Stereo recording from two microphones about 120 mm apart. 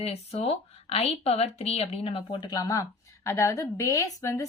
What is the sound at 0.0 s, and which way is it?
A woman's voice, 55° left (ahead or behind).